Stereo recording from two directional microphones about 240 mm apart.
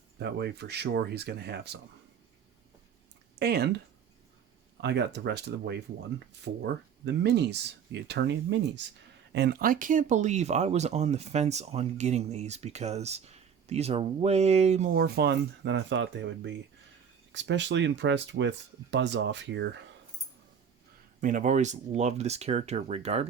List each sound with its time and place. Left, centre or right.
0.2 s speech: right
3.3 s speech: right
4.8 s speech: right
7.0 s speech: right
21.2 s speech: right